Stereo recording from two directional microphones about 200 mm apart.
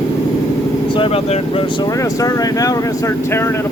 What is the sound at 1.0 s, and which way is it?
Speech, 30° left (ahead or behind).